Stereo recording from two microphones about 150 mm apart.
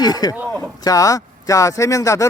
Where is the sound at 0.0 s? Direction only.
25° left (ahead or behind).